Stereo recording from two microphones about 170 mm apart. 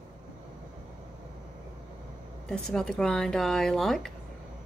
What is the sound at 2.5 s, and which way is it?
Keys jangling, 5° left (ahead or behind).